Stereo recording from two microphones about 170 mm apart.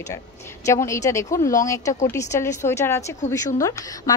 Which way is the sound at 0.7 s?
15° left (ahead or behind).